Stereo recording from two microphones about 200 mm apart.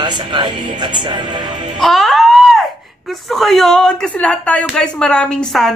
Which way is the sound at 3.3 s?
Centre (ahead or behind).